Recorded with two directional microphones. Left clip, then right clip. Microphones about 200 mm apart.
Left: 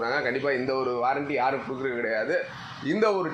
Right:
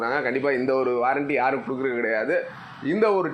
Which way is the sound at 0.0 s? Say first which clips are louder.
Right 2 dB; 40° right (ahead or behind).